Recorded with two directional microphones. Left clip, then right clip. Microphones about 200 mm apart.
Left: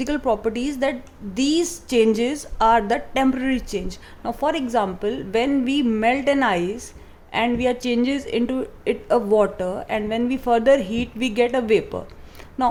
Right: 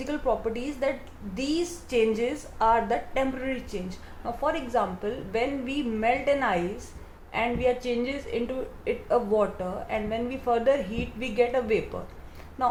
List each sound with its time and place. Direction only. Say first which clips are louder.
0.0 s a woman's voice: left 6 dB; 55° left (ahead or behind)